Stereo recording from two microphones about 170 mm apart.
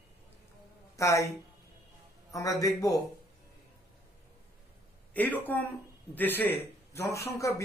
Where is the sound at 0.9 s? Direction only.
20° left (ahead or behind).